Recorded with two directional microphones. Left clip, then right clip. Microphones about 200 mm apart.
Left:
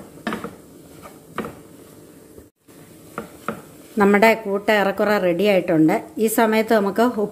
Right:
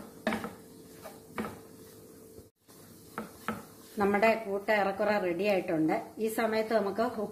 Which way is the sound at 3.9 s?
55° left (ahead or behind).